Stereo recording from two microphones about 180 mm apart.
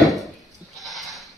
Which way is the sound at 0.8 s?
Centre (ahead or behind).